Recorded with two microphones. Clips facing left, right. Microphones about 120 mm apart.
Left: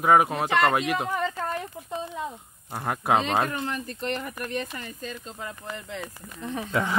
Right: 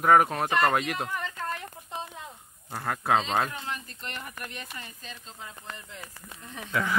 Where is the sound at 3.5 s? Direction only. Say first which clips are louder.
Left 6 dB; 55° left (ahead or behind).